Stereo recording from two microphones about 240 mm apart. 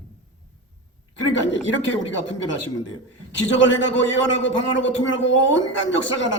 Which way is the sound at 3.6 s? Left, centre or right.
Left.